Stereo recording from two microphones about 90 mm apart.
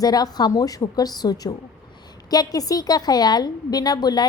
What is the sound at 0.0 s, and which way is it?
A woman's voice, 45° left (ahead or behind).